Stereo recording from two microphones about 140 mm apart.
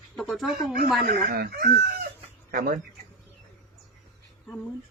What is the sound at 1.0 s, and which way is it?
Speech, 90° right.